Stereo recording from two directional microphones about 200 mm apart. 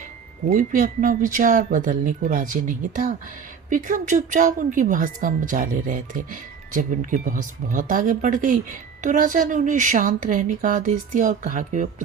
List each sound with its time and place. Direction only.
0.4 s speech: 40° right (ahead or behind)